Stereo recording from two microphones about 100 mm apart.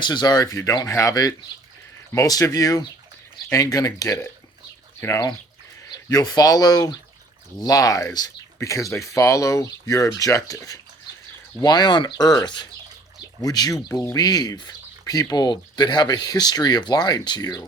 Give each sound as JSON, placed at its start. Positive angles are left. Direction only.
{"t": 0.0, "sound": "speech", "side_deg": 45}
{"t": 6.1, "sound": "speech", "side_deg": 40}